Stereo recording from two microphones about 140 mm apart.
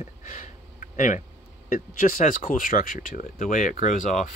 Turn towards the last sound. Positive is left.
turn(degrees=60)  # may be behind; listen again after turning